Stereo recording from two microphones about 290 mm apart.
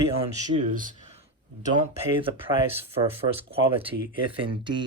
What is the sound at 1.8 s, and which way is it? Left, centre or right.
Speech, centre.